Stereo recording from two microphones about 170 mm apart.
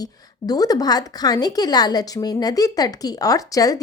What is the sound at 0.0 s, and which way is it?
A woman's voice, 20° left (ahead or behind).